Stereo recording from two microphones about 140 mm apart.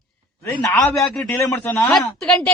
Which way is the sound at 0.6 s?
20° left (ahead or behind).